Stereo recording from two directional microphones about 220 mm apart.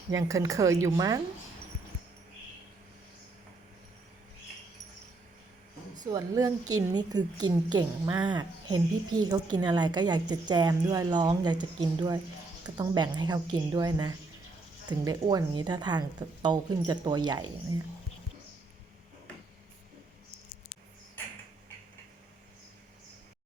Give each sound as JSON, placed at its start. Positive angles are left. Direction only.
{"t": 0.1, "sound": "a woman's voice", "side_deg": -15}
{"t": 6.1, "sound": "a woman's voice", "side_deg": -15}
{"t": 21.2, "sound": "mechanisms", "side_deg": 10}